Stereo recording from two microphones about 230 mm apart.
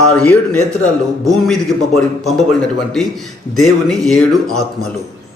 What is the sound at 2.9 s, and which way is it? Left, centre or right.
A man's voice, centre.